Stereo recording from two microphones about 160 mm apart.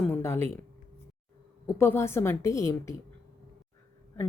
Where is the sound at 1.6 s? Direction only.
15° left (ahead or behind).